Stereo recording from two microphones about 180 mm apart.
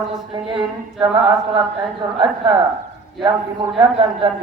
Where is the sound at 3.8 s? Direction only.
25° right (ahead or behind).